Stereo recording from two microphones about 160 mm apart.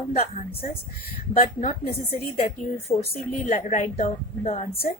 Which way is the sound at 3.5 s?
45° left (ahead or behind).